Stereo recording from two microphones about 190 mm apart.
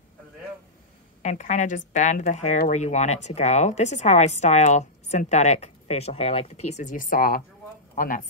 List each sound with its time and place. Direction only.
1.2 s a woman's voice: 40° left (ahead or behind)